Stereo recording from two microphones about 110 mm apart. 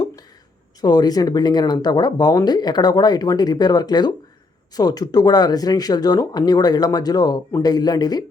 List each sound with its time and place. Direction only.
0.8 s speech: 35° left (ahead or behind)